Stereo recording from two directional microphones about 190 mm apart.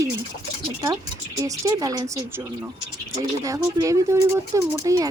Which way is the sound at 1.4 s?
20° right (ahead or behind).